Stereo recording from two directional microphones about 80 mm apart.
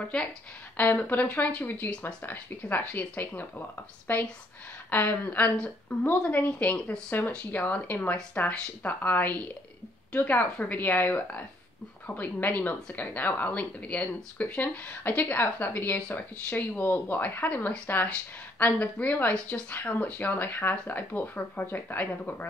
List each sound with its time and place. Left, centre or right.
0.1 s speech: centre
0.7 s speech: left